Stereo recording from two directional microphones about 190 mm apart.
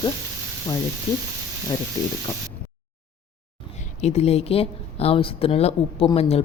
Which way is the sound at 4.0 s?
35° left (ahead or behind).